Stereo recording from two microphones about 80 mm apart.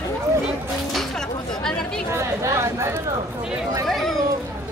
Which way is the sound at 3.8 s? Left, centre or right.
Centre.